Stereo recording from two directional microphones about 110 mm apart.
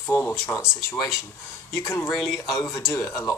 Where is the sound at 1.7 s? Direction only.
25° left (ahead or behind).